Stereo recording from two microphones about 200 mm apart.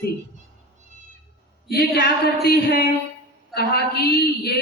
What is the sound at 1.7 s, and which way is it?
A woman's voice, 55° left (ahead or behind).